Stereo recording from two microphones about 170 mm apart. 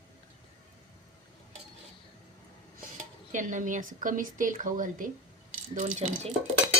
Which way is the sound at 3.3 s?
50° right (ahead or behind).